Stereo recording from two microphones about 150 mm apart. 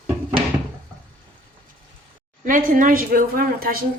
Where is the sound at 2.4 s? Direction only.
65° right (ahead or behind); by 3.8 s 80° right.